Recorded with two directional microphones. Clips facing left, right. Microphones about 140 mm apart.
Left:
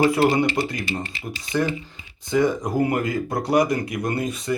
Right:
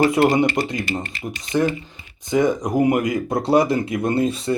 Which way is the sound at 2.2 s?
20° right (ahead or behind).